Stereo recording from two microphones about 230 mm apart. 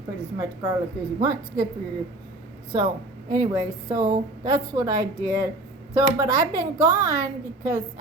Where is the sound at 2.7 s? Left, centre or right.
Centre.